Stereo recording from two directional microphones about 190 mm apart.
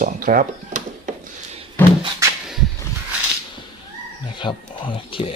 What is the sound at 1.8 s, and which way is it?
Music, 10° left (ahead or behind).